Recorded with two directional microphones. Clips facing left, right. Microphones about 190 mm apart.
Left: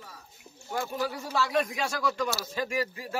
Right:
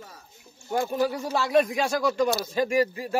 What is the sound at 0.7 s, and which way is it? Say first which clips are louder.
Speech: right 6 dB; 40° right (ahead or behind).